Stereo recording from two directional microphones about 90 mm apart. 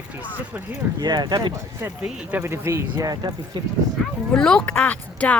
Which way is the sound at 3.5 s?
55° right (ahead or behind).